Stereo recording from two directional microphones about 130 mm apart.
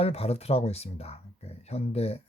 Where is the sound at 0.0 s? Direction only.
50° left (ahead or behind).